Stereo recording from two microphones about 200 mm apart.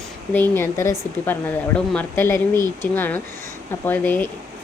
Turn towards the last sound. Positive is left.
turn(degrees=10)  # may be behind; listen again after turning